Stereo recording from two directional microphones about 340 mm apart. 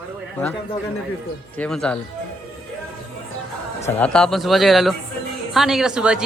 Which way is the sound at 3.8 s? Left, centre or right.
Centre.